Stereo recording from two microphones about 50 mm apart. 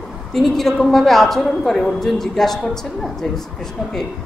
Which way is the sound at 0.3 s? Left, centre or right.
Centre.